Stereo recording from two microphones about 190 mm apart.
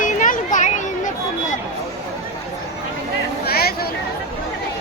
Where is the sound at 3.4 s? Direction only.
55° left (ahead or behind).